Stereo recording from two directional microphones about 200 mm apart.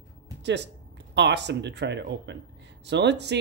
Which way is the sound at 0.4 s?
60° right (ahead or behind).